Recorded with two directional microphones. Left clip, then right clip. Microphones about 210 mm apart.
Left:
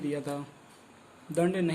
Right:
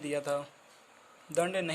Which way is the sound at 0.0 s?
25° right (ahead or behind).